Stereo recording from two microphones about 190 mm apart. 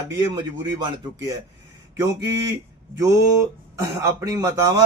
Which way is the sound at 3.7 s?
15° right (ahead or behind).